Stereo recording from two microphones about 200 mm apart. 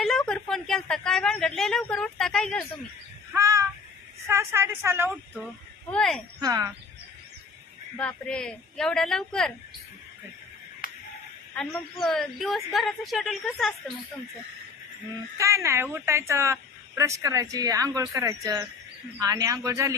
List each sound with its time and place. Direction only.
0.0 s a woman's voice: centre (ahead or behind)
3.3 s speech: 15° right (ahead or behind)
5.3 s speech: centre (ahead or behind)
6.4 s speech: 15° right (ahead or behind)
8.0 s a woman's voice: 5° left (ahead or behind)
11.5 s a woman's voice: centre (ahead or behind)
15.3 s speech: 15° right (ahead or behind)